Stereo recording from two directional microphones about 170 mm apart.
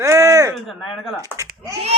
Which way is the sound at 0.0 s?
15° right (ahead or behind).